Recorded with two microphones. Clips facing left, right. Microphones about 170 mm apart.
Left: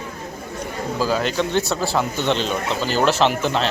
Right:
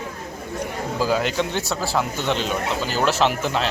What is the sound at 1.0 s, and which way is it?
Speech, 15° right (ahead or behind).